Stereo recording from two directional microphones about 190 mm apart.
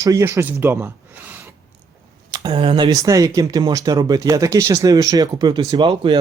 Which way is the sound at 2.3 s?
25° right (ahead or behind).